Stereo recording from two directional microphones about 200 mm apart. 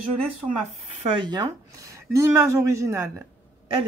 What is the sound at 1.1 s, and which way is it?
Speech, 20° right (ahead or behind).